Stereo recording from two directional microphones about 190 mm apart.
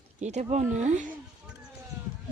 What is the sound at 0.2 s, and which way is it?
Speech, 35° right (ahead or behind).